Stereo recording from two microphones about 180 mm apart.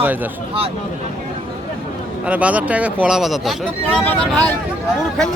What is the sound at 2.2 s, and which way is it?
Speech, 10° right (ahead or behind).